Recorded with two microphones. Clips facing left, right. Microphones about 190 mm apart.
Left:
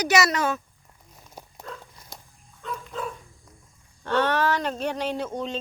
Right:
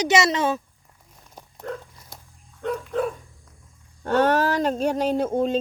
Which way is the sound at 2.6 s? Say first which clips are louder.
Right 8 dB; 65° right (ahead or behind).